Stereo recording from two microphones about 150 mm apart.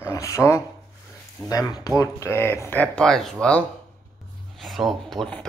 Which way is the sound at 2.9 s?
5° left (ahead or behind).